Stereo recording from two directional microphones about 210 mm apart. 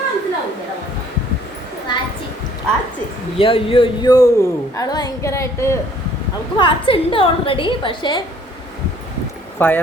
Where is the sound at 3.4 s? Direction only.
25° left (ahead or behind).